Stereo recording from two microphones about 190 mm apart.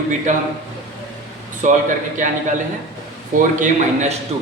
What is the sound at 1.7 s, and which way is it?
Speech, 45° right (ahead or behind).